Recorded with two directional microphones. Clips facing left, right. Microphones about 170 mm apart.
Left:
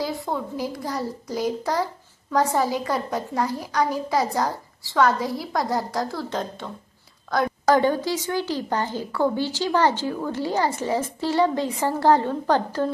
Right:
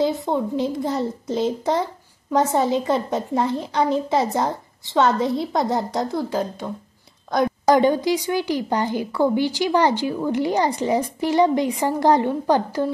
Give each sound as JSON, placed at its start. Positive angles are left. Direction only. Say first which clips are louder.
{"t": 0.0, "sound": "a woman's voice", "louder": "right 6 dB", "side_deg": -20}
{"t": 7.2, "sound": "a woman's voice", "louder": "right 2 dB", "side_deg": -20}